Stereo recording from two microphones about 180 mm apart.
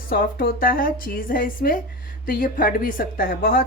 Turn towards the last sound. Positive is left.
turn(degrees=55)  # may be behind; listen again after turning